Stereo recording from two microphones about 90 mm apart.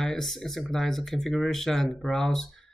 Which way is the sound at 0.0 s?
5° left (ahead or behind).